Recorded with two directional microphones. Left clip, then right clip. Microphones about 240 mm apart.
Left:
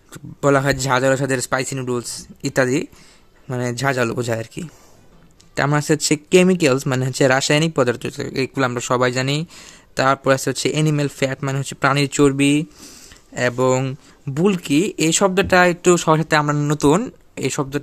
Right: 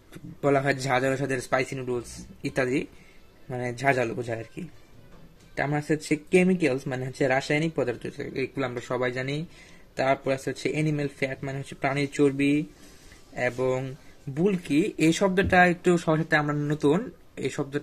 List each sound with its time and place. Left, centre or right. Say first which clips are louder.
0.1 s a man's voice: left 7 dB; left